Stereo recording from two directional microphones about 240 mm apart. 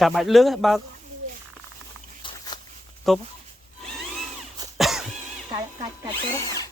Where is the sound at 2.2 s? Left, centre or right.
Centre.